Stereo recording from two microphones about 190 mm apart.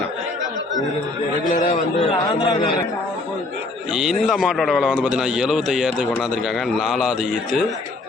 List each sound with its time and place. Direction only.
1.6 s a man's voice: 25° left (ahead or behind)
3.9 s a man's voice: centre (ahead or behind)